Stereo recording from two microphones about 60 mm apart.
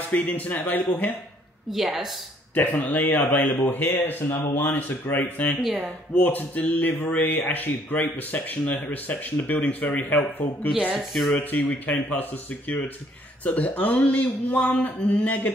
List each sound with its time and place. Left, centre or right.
0.1 s speech: left
1.7 s speech: centre
2.5 s speech: left